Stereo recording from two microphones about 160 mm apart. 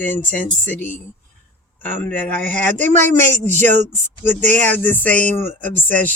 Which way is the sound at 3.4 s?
10° left (ahead or behind).